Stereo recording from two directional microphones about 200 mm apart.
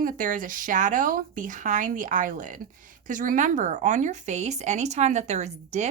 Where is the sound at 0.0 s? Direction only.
40° right (ahead or behind).